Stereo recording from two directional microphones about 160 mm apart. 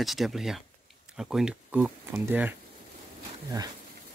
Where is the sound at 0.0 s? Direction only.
Centre (ahead or behind).